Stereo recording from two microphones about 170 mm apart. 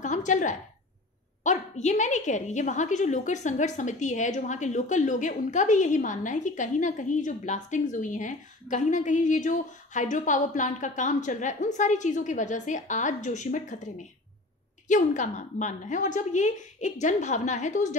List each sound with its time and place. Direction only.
0.0 s a sound: 45° left (ahead or behind)
1.4 s a woman's voice: 45° left (ahead or behind)
14.9 s a woman's voice: 45° left (ahead or behind)